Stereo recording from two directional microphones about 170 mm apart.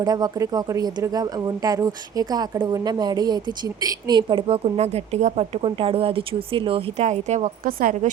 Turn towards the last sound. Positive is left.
turn(degrees=-60)  # may be behind; listen again after turning